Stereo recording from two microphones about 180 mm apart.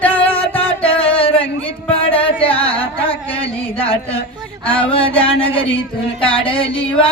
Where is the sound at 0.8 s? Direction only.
30° left (ahead or behind).